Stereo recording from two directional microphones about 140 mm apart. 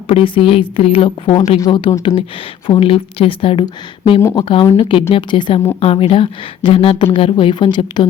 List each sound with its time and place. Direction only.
0.1 s speech: 40° left (ahead or behind)